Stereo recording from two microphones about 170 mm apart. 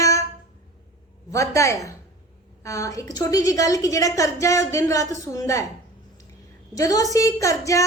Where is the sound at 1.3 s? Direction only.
20° left (ahead or behind).